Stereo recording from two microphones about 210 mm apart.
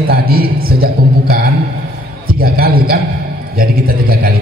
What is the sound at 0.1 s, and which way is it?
A man's voice, 45° right (ahead or behind).